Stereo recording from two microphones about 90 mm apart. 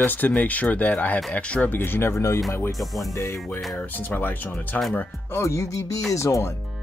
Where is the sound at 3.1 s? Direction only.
35° left (ahead or behind).